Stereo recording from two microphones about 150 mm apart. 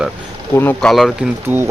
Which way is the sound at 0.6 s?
15° left (ahead or behind).